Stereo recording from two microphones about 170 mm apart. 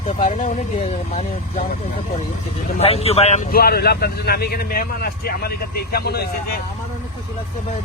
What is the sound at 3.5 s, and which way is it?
Speech, 65° left (ahead or behind).